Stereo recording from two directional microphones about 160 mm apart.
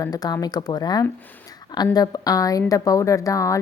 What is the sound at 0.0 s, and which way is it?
Speech, 25° left (ahead or behind).